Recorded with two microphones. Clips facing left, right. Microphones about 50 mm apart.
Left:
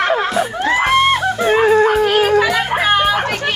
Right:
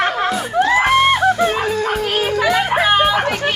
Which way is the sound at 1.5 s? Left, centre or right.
Left.